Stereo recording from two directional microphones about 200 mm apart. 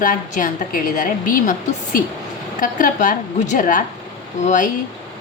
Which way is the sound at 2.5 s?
40° left (ahead or behind).